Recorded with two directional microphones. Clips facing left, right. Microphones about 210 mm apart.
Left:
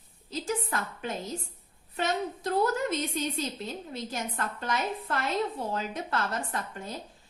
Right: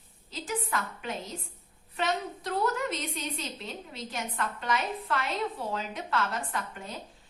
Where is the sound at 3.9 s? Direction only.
45° left (ahead or behind).